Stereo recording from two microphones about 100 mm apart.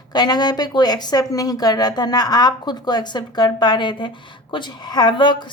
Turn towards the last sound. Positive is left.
turn(degrees=50)  # may be behind; listen again after turning